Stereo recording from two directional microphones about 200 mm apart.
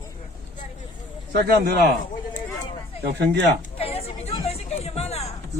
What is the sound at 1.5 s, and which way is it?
Speech, 50° right (ahead or behind).